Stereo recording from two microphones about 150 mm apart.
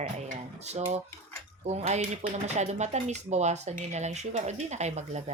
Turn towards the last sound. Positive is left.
turn(degrees=-50)  # may be behind; listen again after turning